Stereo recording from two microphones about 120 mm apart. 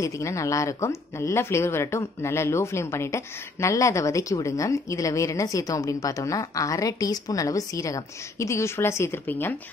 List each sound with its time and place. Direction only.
0.0 s a woman's voice: 25° left (ahead or behind)